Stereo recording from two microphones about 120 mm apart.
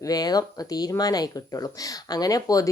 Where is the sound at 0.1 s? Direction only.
35° left (ahead or behind).